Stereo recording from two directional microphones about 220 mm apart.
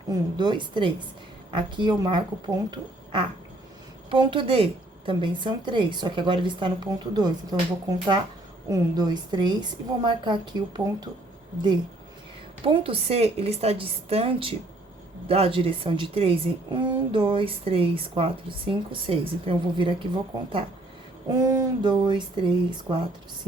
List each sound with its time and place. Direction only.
0.1 s a woman's voice: 20° right (ahead or behind)
12.6 s a woman's voice: 25° right (ahead or behind)